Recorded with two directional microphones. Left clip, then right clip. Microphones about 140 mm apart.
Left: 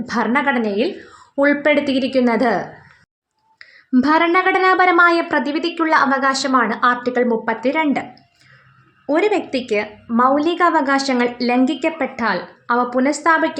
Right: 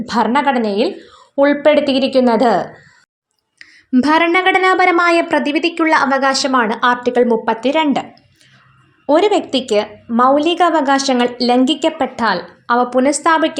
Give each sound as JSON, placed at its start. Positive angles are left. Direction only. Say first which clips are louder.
{"t": 0.0, "sound": "a woman's voice", "louder": "right 4 dB", "side_deg": -15}
{"t": 3.9, "sound": "a woman's voice", "louder": "right 2 dB", "side_deg": -15}
{"t": 9.0, "sound": "a woman's voice", "louder": "right 5 dB", "side_deg": -25}